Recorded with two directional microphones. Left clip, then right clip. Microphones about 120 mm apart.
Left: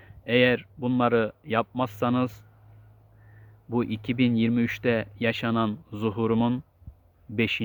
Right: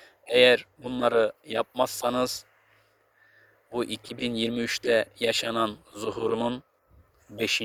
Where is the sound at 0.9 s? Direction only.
30° right (ahead or behind).